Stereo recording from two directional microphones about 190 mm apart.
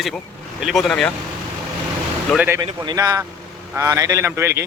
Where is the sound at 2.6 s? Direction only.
25° right (ahead or behind).